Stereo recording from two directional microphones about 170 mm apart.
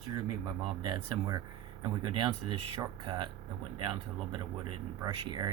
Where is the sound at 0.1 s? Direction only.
25° right (ahead or behind).